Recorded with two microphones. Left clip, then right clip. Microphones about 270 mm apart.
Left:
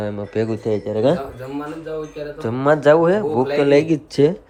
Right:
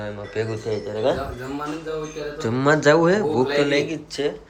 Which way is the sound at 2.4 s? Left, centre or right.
Centre.